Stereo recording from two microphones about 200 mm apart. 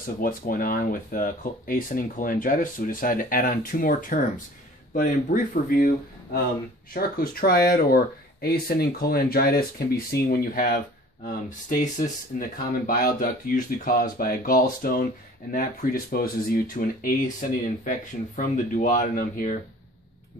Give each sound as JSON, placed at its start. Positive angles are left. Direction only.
{"t": 0.0, "sound": "speech", "side_deg": 45}
{"t": 6.9, "sound": "speech", "side_deg": 45}